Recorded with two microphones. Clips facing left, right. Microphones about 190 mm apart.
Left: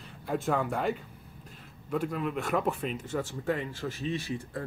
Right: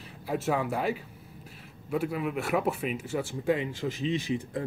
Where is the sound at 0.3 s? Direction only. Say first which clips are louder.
Right 1 dB; 5° right (ahead or behind).